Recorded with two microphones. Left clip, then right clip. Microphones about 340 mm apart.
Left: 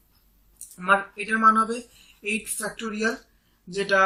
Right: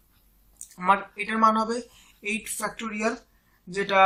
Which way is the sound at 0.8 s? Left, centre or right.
Centre.